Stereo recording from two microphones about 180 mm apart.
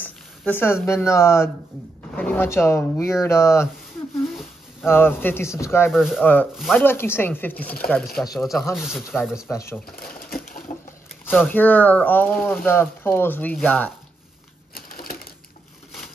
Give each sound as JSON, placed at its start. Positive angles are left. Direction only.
{"t": 0.0, "sound": "a sound", "side_deg": 10}
{"t": 0.8, "sound": "speech", "side_deg": 15}
{"t": 4.2, "sound": "a sound", "side_deg": 0}
{"t": 4.8, "sound": "speech", "side_deg": 10}
{"t": 5.9, "sound": "speech", "side_deg": 0}
{"t": 6.8, "sound": "speech", "side_deg": 10}
{"t": 9.9, "sound": "speech", "side_deg": 55}
{"t": 11.2, "sound": "speech", "side_deg": 10}
{"t": 14.7, "sound": "crushing", "side_deg": 55}